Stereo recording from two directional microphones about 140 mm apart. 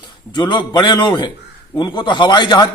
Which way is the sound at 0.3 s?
30° left (ahead or behind).